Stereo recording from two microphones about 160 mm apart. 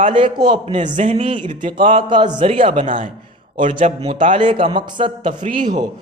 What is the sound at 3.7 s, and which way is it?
A man's voice, 35° right (ahead or behind).